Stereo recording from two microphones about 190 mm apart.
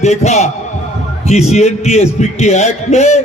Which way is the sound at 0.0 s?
35° left (ahead or behind).